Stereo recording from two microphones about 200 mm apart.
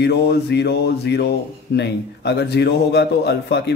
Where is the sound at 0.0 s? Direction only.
55° left (ahead or behind).